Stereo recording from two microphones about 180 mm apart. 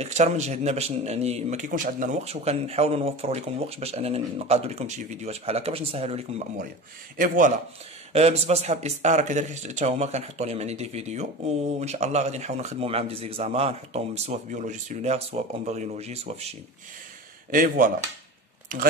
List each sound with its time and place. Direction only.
0.0 s speech: 40° right (ahead or behind)
7.2 s speech: 45° right (ahead or behind)
8.1 s speech: 35° right (ahead or behind)
17.5 s speech: 50° right (ahead or behind)